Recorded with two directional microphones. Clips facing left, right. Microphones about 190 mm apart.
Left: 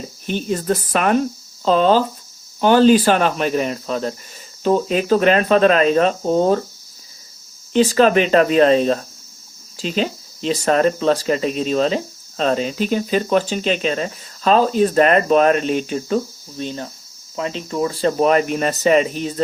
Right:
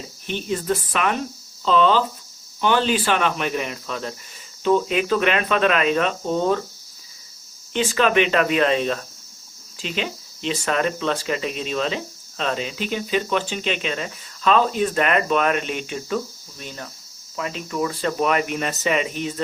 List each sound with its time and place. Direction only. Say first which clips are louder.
0.3 s speech: left 4 dB; 40° left (ahead or behind)
7.7 s speech: left 6 dB; 35° left (ahead or behind)